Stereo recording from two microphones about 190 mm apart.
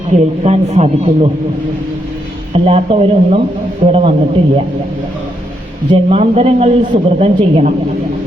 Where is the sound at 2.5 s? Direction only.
35° right (ahead or behind).